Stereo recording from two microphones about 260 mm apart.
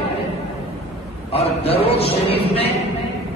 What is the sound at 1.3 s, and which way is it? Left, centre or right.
A man's voice, left.